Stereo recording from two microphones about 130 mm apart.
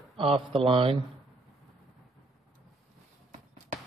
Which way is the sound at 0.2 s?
45° right (ahead or behind).